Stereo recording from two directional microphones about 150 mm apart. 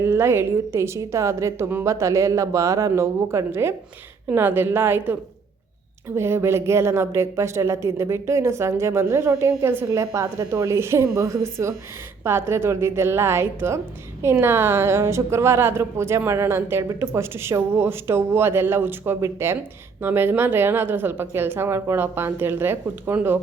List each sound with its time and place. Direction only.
0.0 s a woman's voice: 15° right (ahead or behind)
6.1 s a woman's voice: 15° right (ahead or behind)